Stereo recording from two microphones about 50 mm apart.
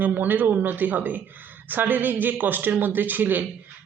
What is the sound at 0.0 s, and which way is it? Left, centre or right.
A woman's voice, right.